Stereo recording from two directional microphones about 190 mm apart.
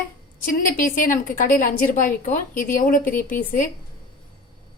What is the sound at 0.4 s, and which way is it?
A woman's voice, 45° left (ahead or behind).